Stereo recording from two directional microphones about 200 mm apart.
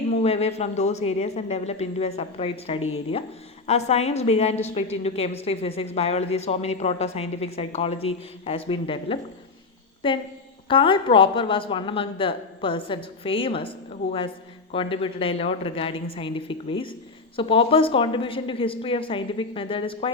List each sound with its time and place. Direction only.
0.1 s a woman's voice: 30° left (ahead or behind)